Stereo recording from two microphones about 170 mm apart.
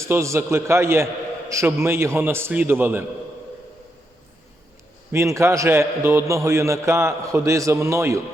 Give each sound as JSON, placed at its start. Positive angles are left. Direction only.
{"t": 0.0, "sound": "a man's voice", "side_deg": -15}
{"t": 5.1, "sound": "a man's voice", "side_deg": -15}